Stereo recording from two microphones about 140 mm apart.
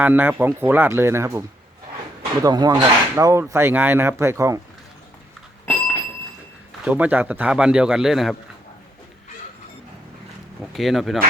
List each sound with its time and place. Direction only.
0.0 s speech: 15° right (ahead or behind)
6.8 s speech: 10° right (ahead or behind)
10.7 s speech: centre (ahead or behind)